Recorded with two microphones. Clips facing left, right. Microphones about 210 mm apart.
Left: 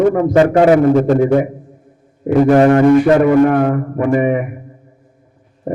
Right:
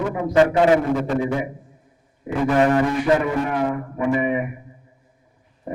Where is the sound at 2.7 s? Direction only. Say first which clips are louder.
Left 9 dB; 60° left (ahead or behind).